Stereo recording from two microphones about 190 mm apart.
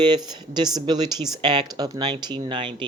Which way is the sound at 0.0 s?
25° right (ahead or behind).